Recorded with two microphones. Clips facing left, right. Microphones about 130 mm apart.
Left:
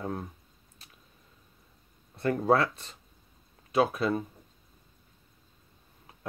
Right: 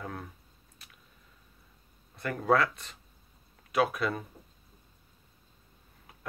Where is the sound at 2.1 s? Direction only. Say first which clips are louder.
Left 2 dB; 30° left (ahead or behind).